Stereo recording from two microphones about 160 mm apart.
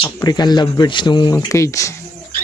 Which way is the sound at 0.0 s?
25° left (ahead or behind).